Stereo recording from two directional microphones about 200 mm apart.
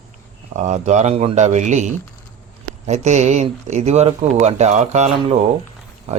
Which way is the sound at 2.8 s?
35° right (ahead or behind).